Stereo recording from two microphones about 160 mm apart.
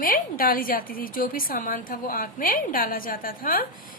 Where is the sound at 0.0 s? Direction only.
65° left (ahead or behind).